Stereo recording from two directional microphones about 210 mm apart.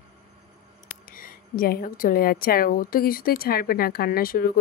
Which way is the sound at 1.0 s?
40° left (ahead or behind).